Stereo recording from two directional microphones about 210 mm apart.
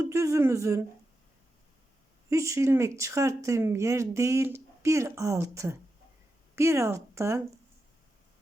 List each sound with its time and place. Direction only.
0.0 s speech: 15° right (ahead or behind)
2.3 s speech: 15° right (ahead or behind)